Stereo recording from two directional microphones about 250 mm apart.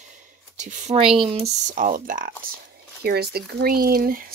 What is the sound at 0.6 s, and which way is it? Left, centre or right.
Speech, right.